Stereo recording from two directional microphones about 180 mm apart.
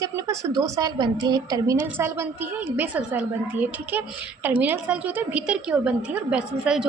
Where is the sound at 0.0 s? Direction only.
20° right (ahead or behind).